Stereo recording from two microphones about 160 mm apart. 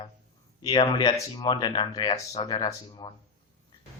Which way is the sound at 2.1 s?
40° left (ahead or behind).